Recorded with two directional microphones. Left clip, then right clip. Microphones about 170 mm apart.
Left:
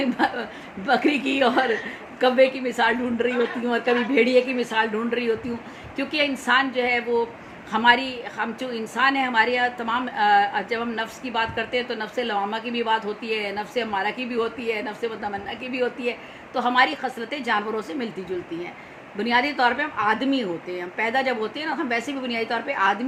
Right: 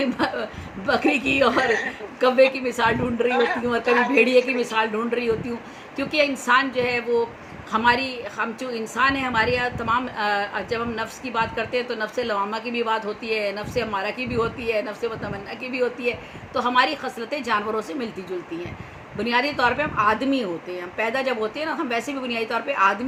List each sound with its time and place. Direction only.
0.0 s a sound: 10° left (ahead or behind)
0.9 s a woman's voice: 10° left (ahead or behind)
3.2 s a man's voice: 45° right (ahead or behind)
4.1 s a woman's voice: 10° left (ahead or behind)
19.1 s a woman's voice: 10° left (ahead or behind)